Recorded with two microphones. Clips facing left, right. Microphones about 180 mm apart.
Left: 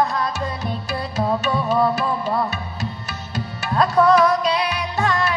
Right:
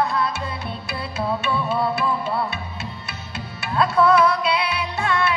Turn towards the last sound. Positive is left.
turn(degrees=35)  # may be behind; listen again after turning